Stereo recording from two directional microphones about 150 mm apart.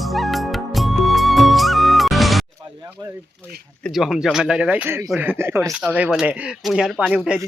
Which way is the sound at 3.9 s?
Centre (ahead or behind).